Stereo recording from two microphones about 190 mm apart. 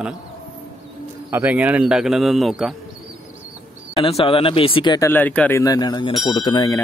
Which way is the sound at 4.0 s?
30° left (ahead or behind).